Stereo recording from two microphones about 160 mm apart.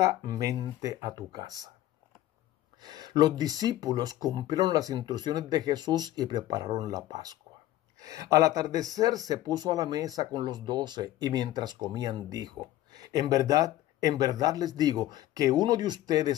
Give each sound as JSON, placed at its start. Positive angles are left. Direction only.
{"t": 0.2, "sound": "speech", "side_deg": -25}
{"t": 2.8, "sound": "speech", "side_deg": -25}